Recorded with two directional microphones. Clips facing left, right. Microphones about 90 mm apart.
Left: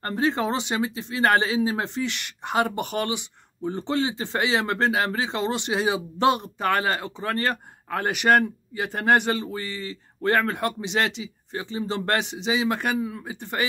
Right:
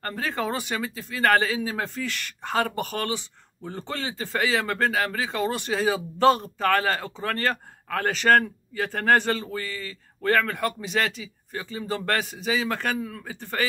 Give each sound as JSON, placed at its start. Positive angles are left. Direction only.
{"t": 0.0, "sound": "speech", "side_deg": 20}